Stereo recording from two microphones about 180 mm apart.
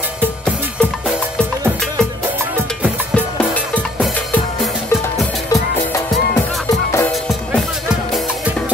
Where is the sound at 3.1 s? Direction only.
10° left (ahead or behind).